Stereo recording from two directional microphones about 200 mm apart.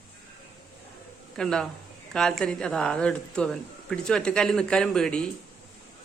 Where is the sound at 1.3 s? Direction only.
5° left (ahead or behind).